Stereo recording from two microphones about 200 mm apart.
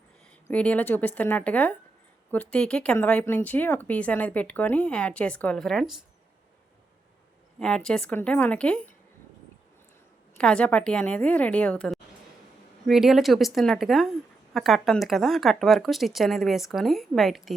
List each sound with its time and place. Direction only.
0.4 s speech: 5° left (ahead or behind)
7.6 s a woman's voice: 5° left (ahead or behind)
10.3 s a woman's voice: 5° left (ahead or behind)